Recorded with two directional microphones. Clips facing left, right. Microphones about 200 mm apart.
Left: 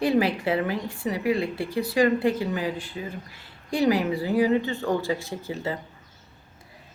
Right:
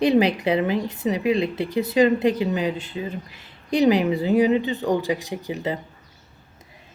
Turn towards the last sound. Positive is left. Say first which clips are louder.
# right 3 dB
turn(degrees=-20)  # may be behind; listen again after turning